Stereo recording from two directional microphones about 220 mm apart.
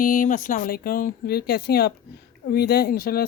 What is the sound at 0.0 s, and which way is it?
Speech, 35° left (ahead or behind).